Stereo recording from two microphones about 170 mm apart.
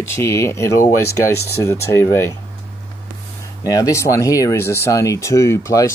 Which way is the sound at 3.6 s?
20° left (ahead or behind).